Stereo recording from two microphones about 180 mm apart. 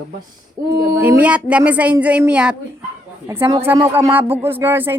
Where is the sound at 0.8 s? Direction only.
10° right (ahead or behind).